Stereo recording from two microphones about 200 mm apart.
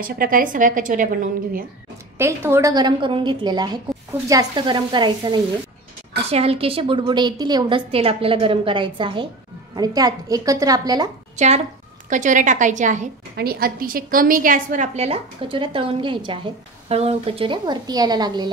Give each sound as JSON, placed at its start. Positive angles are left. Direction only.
{"t": 0.0, "sound": "a woman's voice", "side_deg": -45}
{"t": 2.1, "sound": "a woman's voice", "side_deg": -10}
{"t": 11.3, "sound": "a woman's voice", "side_deg": -35}